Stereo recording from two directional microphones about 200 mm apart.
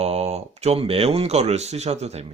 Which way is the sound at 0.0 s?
30° right (ahead or behind).